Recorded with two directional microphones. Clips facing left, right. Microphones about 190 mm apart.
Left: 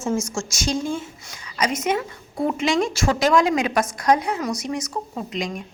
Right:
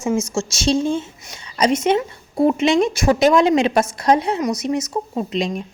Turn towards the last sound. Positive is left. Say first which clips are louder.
# right 6 dB
turn(degrees=-25)  # may be behind; listen again after turning